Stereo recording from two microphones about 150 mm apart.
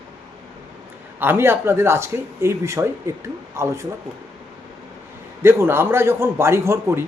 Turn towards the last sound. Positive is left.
turn(degrees=-15)  # may be behind; listen again after turning